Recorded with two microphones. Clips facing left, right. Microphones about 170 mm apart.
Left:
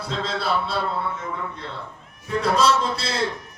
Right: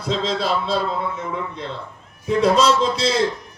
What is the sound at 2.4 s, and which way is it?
Speech, 90° right.